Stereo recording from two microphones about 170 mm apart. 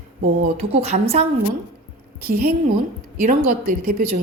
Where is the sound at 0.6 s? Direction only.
40° right (ahead or behind).